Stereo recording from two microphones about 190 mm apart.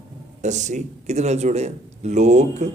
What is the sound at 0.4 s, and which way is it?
Speech, 40° right (ahead or behind).